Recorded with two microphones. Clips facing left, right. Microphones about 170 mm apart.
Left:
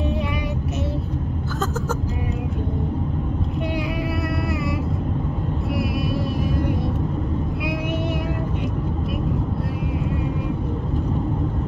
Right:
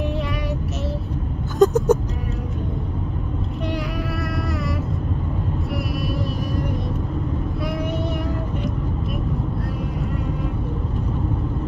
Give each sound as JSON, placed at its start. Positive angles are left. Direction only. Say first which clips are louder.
{"t": 1.6, "sound": "music", "louder": "right 13 dB", "side_deg": -15}